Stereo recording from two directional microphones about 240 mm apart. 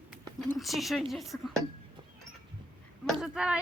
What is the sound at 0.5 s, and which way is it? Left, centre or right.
A woman's voice, centre.